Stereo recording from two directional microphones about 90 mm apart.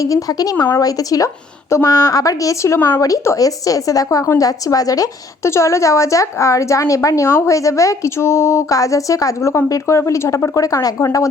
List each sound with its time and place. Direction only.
0.0 s a woman's voice: 40° left (ahead or behind); by 3.0 s 25° left (ahead or behind)
3.0 s a woman's voice: 40° left (ahead or behind)